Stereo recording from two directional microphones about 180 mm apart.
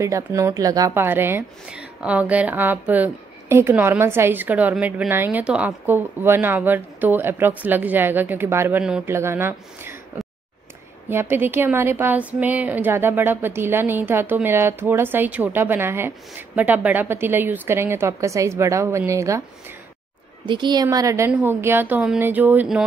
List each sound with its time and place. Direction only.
0.0 s a woman's voice: 15° right (ahead or behind)
20.4 s a woman's voice: 25° right (ahead or behind); by 22.8 s 5° right (ahead or behind)